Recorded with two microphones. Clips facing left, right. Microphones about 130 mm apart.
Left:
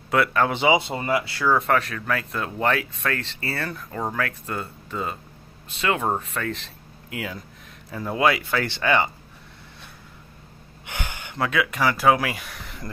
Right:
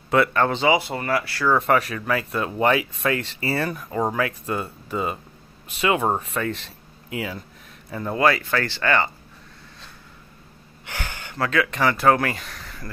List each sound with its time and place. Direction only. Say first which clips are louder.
0.1 s speech: right 2 dB; centre (ahead or behind)
0.5 s speech: even; 15° left (ahead or behind)
1.5 s speech: right 2 dB; centre (ahead or behind); by 9.1 s 15° left (ahead or behind)
10.9 s speech: even; 15° left (ahead or behind)